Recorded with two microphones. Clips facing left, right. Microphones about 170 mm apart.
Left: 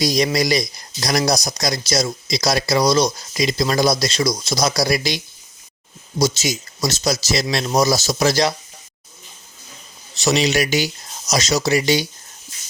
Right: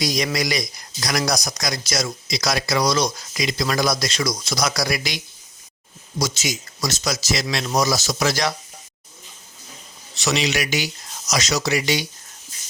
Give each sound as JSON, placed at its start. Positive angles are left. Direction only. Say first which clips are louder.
{"t": 0.0, "sound": "speech", "louder": "left 5 dB", "side_deg": 30}
{"t": 10.2, "sound": "speech", "louder": "left 5 dB", "side_deg": 30}